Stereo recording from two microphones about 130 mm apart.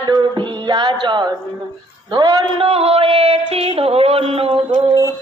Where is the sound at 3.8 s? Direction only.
50° right (ahead or behind).